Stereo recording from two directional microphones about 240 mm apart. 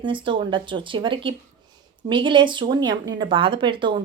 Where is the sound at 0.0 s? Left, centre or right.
Right.